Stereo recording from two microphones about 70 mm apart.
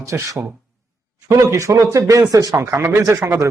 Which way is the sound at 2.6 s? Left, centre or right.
Right.